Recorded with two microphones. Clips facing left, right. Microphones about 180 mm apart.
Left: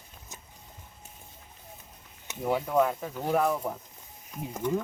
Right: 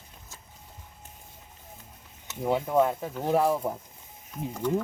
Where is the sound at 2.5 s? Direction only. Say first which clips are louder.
Right 1 dB; 25° right (ahead or behind).